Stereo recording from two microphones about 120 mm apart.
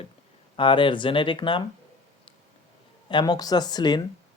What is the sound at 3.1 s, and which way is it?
Speech, 35° left (ahead or behind).